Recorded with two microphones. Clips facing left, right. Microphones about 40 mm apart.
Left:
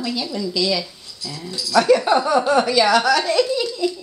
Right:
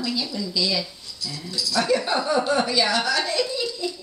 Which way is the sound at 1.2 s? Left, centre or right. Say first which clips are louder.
Left 2 dB; left.